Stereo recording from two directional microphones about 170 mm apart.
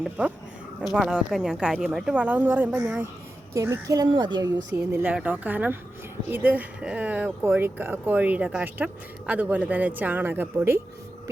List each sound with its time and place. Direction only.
0.0 s a woman's voice: 5° right (ahead or behind); by 4.5 s 25° right (ahead or behind)
4.5 s speech: 10° right (ahead or behind)